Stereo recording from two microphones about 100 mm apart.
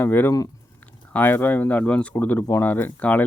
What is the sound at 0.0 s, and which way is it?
Speech, 20° left (ahead or behind).